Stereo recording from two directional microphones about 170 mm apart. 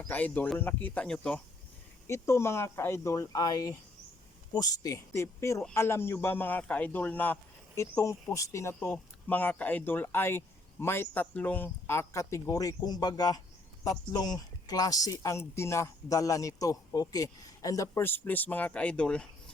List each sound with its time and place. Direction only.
0.0 s speech: 10° left (ahead or behind)
2.0 s speech: 15° left (ahead or behind)